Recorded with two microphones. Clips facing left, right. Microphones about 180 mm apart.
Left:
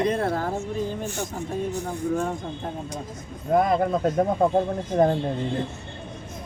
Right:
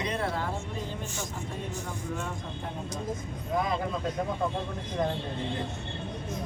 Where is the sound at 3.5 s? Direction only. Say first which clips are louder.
Left 9 dB; 55° left (ahead or behind).